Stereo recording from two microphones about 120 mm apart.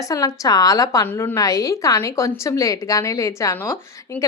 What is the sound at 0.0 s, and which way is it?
A woman's voice, 30° left (ahead or behind).